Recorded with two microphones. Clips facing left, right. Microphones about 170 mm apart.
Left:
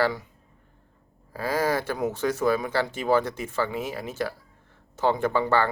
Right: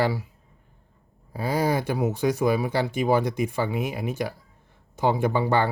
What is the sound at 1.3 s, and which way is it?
Speech, 15° right (ahead or behind).